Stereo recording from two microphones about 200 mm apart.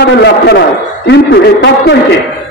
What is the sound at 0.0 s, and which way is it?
A man's voice, 55° left (ahead or behind).